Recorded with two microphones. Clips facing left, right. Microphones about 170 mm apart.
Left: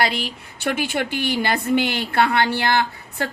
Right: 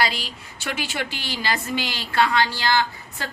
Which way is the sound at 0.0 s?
55° left (ahead or behind).